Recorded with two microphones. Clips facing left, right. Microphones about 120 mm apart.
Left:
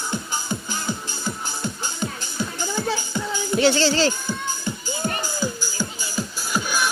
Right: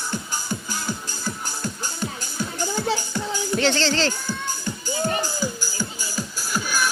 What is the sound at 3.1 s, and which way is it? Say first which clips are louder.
Music: left 1 dB; 10° left (ahead or behind).